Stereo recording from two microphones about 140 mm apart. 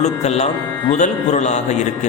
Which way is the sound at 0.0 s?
50° left (ahead or behind).